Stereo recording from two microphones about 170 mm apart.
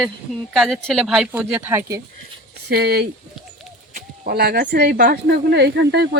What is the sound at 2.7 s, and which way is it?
Speech, 65° right (ahead or behind).